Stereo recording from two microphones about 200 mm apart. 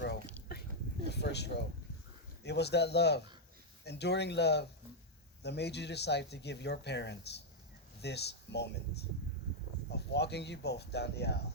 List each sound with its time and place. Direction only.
0.5 s whispering: 50° left (ahead or behind)
1.0 s a sound: 55° left (ahead or behind)
2.4 s speech: 55° left (ahead or behind)
9.9 s speech: 55° left (ahead or behind)